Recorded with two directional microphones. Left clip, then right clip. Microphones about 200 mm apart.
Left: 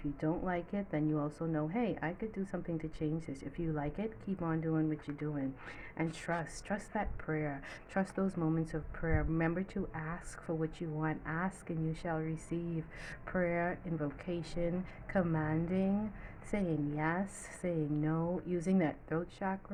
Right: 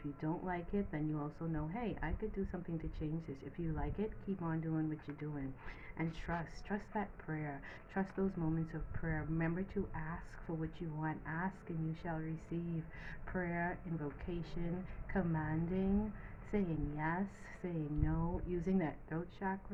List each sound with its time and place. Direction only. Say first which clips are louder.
0.2 s a woman's voice: left 5 dB; 45° left (ahead or behind)
6.0 s a woman's voice: left 5 dB; 45° left (ahead or behind)